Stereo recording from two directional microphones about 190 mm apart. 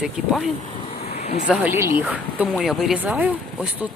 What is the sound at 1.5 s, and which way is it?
A woman's voice, 10° right (ahead or behind).